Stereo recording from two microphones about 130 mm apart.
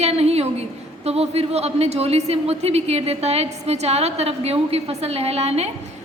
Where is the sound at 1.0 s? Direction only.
55° right (ahead or behind).